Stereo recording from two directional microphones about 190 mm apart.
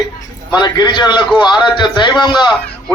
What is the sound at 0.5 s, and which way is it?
A man's voice, 20° left (ahead or behind).